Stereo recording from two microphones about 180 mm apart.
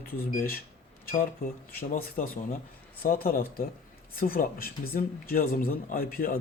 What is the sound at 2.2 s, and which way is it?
Speech, 50° left (ahead or behind).